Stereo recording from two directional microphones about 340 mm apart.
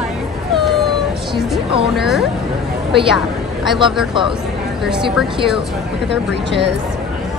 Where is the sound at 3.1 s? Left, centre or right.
Centre.